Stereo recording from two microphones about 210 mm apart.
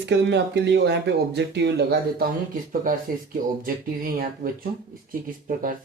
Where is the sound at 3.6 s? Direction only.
40° right (ahead or behind).